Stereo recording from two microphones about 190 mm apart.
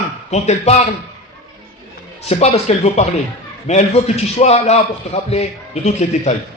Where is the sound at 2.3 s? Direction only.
35° left (ahead or behind).